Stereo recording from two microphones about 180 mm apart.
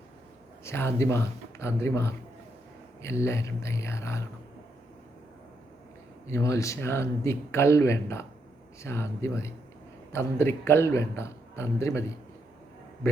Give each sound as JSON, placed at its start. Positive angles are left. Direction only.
{"t": 0.6, "sound": "speech", "side_deg": 15}
{"t": 6.2, "sound": "speech", "side_deg": 15}